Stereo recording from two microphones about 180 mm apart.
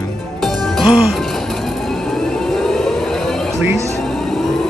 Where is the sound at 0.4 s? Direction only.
Centre (ahead or behind).